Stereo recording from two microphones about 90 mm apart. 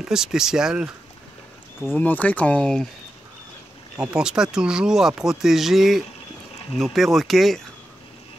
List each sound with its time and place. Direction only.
0.0 s speech: 5° right (ahead or behind)
2.0 s speech: 15° left (ahead or behind)
3.9 s speech: 10° right (ahead or behind)